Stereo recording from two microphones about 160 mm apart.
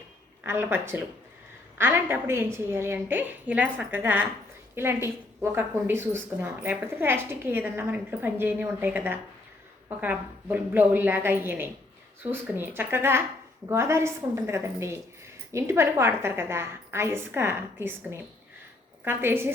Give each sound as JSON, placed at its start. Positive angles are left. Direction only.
{"t": 0.4, "sound": "speech", "side_deg": -15}